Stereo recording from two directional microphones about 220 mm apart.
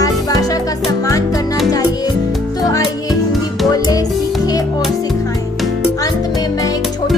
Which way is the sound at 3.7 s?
15° left (ahead or behind).